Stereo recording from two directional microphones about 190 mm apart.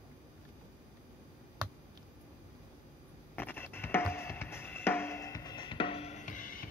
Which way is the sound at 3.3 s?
10° left (ahead or behind).